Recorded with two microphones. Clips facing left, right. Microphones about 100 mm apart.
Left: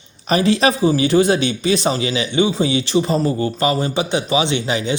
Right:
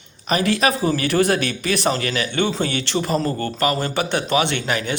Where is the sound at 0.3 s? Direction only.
30° left (ahead or behind); by 2.6 s 10° left (ahead or behind).